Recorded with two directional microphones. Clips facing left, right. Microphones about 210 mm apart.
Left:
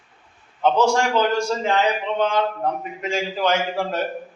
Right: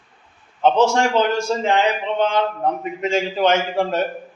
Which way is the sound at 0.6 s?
20° right (ahead or behind).